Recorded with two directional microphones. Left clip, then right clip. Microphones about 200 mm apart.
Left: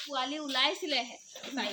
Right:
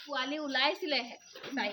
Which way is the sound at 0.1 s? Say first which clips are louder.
Right 1 dB; 50° right (ahead or behind).